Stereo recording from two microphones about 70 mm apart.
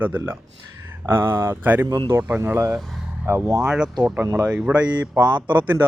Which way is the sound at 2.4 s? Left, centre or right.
Right.